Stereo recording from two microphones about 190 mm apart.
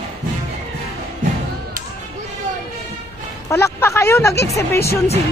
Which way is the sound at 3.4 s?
15° left (ahead or behind).